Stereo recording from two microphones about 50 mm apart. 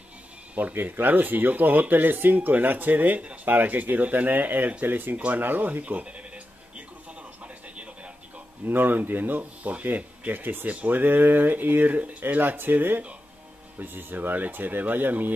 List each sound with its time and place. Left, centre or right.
0.6 s speech: right
7.4 s television: right
8.6 s speech: right